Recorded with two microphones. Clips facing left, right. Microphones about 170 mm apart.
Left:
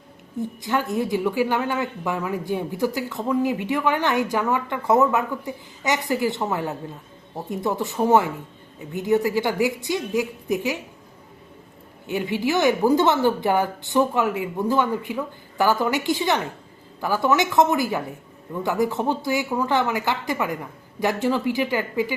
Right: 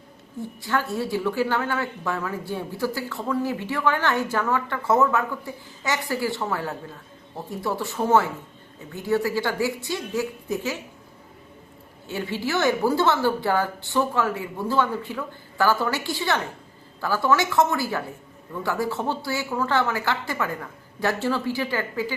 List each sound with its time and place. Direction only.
0.3 s a woman's voice: 20° left (ahead or behind)
12.0 s a woman's voice: 15° left (ahead or behind)